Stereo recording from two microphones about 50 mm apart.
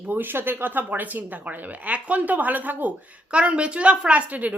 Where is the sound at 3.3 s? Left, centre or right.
Right.